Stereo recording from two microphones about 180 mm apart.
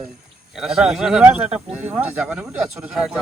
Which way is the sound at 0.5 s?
5° right (ahead or behind).